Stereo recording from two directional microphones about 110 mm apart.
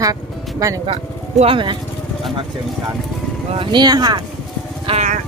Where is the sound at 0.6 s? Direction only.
30° right (ahead or behind).